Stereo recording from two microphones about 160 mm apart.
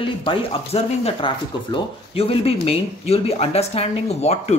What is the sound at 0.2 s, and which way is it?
Speech, 35° left (ahead or behind).